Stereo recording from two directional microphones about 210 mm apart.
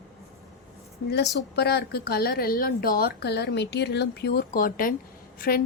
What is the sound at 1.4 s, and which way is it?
A woman's voice, 50° left (ahead or behind).